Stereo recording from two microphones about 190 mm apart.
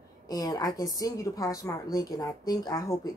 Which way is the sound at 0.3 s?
20° left (ahead or behind).